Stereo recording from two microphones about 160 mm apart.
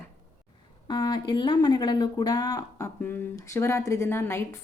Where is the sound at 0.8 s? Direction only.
25° left (ahead or behind).